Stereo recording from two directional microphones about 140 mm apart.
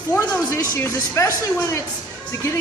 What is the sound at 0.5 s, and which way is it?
A woman's voice, 15° left (ahead or behind).